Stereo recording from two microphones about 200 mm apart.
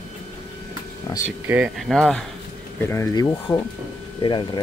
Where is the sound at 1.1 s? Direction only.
20° left (ahead or behind).